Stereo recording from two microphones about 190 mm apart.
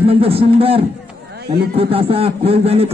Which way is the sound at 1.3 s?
55° right (ahead or behind).